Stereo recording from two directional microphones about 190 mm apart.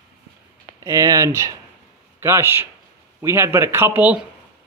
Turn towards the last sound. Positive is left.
turn(degrees=-10)  # may be behind; listen again after turning